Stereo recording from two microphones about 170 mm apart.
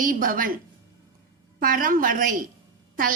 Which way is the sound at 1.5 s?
55° right (ahead or behind).